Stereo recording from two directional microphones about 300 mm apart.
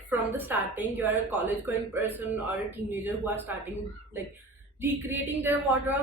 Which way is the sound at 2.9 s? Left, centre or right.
Centre.